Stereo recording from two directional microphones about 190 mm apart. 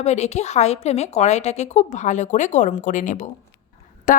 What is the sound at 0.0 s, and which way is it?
A woman's voice, 35° left (ahead or behind).